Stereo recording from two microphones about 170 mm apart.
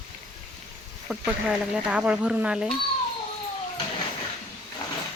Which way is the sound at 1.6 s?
5° right (ahead or behind).